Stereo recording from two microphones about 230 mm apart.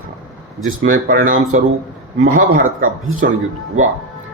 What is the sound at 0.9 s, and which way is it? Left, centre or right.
Speech, right.